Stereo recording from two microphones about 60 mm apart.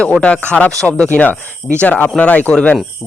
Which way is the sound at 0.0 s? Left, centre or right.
Centre.